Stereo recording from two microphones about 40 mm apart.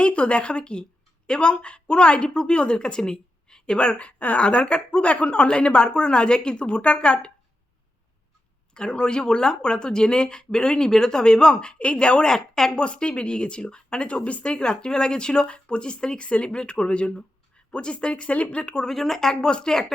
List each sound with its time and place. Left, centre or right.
0.0 s speech: left
4.2 s speech: left
4.4 s speech: left
8.7 s speech: left
12.7 s speech: left
18.9 s speech: centre
19.4 s speech: left